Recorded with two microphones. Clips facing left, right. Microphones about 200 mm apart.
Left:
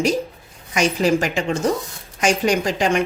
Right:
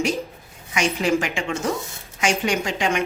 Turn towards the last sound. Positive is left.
turn(degrees=35)  # may be behind; listen again after turning